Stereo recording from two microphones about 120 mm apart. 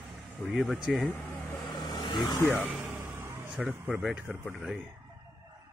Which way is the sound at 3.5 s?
10° right (ahead or behind).